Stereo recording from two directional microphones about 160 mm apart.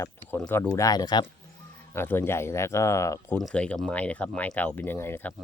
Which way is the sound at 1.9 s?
15° left (ahead or behind).